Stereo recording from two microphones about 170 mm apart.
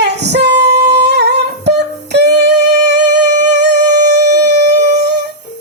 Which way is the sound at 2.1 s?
80° right.